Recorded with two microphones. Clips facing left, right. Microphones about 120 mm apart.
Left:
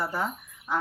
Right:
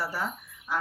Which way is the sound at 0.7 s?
20° left (ahead or behind).